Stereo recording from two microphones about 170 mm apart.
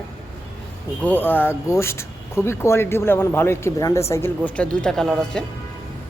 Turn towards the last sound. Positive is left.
turn(degrees=5)  # may be behind; listen again after turning